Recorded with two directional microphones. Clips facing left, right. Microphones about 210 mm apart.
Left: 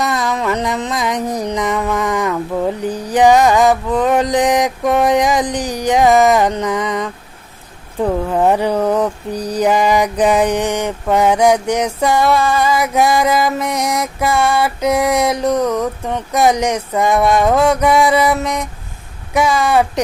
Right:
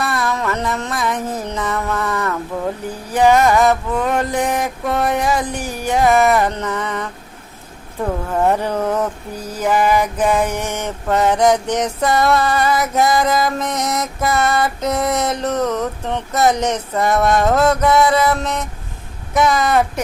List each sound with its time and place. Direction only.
0.0 s music: 20° left (ahead or behind)
2.8 s mantra: 20° left (ahead or behind)
8.3 s mantra: 15° left (ahead or behind)